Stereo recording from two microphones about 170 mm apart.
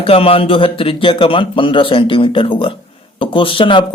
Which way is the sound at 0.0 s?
35° left (ahead or behind).